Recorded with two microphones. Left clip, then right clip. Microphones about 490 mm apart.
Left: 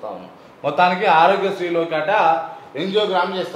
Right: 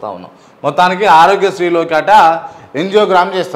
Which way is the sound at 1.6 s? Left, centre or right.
Right.